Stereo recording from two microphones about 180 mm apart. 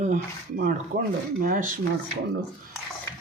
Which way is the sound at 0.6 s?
50° right (ahead or behind).